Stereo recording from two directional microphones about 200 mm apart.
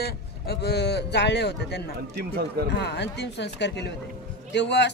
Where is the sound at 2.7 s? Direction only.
55° left (ahead or behind).